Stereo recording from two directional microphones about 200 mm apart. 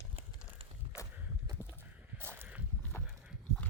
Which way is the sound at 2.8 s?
5° left (ahead or behind).